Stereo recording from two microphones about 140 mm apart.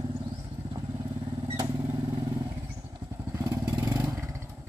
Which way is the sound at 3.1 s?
20° right (ahead or behind).